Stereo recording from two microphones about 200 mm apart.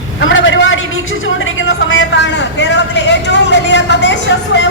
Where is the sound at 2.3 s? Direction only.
65° left (ahead or behind).